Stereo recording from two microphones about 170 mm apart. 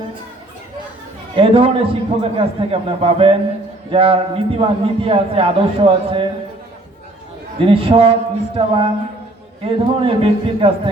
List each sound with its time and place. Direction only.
1.4 s a man's voice: 35° right (ahead or behind)
7.6 s a man's voice: 35° right (ahead or behind)